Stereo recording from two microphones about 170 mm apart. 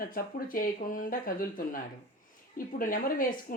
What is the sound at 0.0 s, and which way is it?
Speech, 55° left (ahead or behind).